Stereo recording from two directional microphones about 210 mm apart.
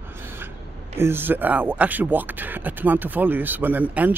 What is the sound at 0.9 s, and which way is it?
Speech, 10° right (ahead or behind).